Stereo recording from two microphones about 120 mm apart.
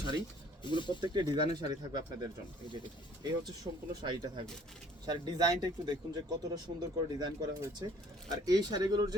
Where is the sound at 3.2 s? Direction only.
35° right (ahead or behind).